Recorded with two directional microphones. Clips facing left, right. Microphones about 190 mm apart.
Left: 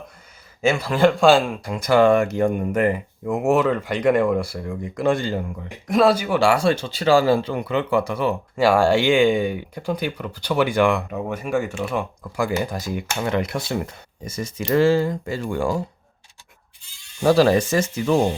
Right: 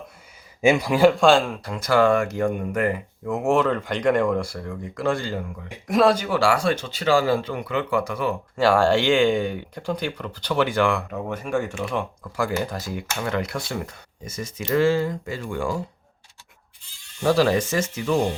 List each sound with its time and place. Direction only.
0.6 s speech: 15° right (ahead or behind); by 5.4 s 20° left (ahead or behind)
5.9 s speech: centre (ahead or behind); by 8.4 s 25° left (ahead or behind)
8.5 s speech: 10° left (ahead or behind); by 15.8 s 35° left (ahead or behind)
17.2 s speech: 35° left (ahead or behind)